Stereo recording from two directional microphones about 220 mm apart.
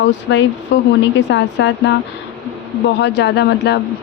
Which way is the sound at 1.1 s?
55° left (ahead or behind).